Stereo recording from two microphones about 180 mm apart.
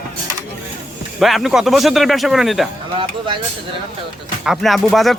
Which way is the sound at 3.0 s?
25° right (ahead or behind).